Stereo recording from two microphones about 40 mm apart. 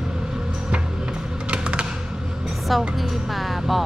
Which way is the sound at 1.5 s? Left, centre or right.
Right.